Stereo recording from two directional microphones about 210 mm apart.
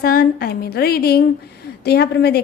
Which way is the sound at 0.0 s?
45° left (ahead or behind).